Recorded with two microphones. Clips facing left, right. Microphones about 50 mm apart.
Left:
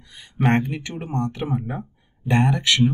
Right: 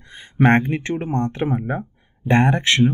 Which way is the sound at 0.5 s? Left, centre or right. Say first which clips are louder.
Right 3 dB; right.